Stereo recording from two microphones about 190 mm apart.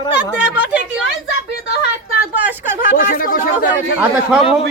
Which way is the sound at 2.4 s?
10° right (ahead or behind).